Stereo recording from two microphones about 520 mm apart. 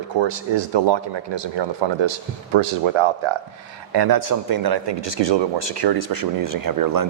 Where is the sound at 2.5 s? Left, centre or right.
Right.